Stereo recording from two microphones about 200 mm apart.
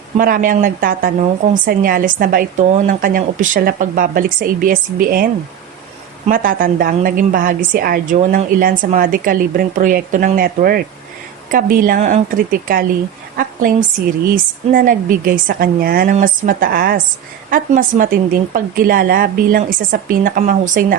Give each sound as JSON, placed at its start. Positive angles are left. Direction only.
{"t": 0.2, "sound": "a woman's voice", "side_deg": -45}